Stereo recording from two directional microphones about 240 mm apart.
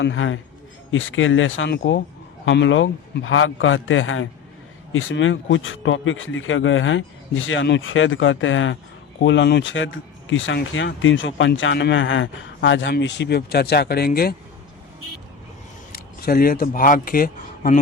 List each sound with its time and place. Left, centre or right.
0.0 s a man's voice: left
15.9 s speech: left